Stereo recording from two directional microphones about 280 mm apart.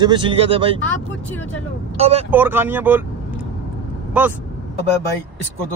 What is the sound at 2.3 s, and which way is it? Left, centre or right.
Speech, centre.